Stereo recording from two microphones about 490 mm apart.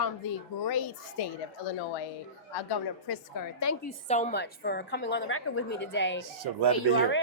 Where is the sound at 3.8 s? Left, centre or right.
Centre.